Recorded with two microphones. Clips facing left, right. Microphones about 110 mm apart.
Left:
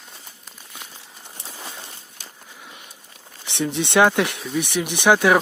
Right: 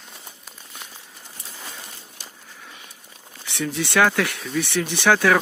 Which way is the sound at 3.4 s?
25° left (ahead or behind).